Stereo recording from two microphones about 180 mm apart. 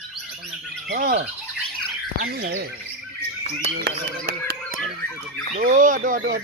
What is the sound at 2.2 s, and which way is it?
Speech, 60° right (ahead or behind).